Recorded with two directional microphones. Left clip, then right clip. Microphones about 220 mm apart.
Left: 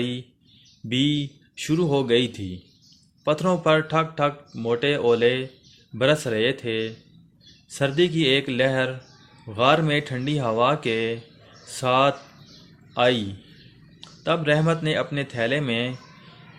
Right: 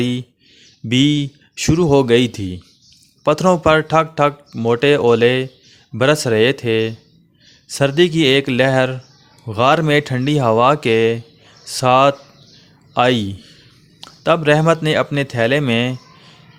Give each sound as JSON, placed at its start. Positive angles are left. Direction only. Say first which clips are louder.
{"t": 0.0, "sound": "a man's voice", "louder": "right 8 dB", "side_deg": -45}